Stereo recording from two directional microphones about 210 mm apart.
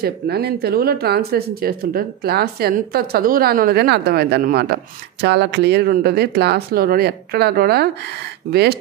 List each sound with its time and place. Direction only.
0.0 s speech: 50° right (ahead or behind)